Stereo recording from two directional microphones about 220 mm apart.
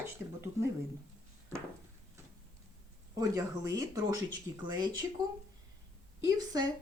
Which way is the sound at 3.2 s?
15° right (ahead or behind).